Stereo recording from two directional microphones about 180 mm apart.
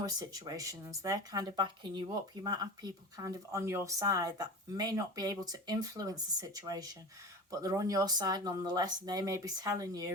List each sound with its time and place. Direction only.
0.0 s speech: 20° right (ahead or behind)